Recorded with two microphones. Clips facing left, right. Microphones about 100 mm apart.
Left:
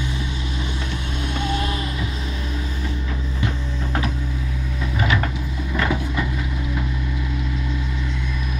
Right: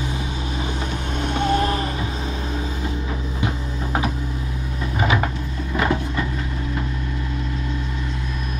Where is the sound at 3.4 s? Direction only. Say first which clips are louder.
Even; 20° right (ahead or behind).